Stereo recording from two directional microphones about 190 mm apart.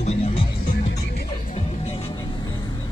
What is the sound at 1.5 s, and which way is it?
Music, 30° left (ahead or behind).